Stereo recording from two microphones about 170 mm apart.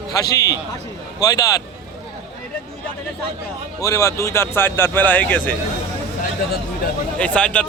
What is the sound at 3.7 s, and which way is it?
Speech, 20° left (ahead or behind).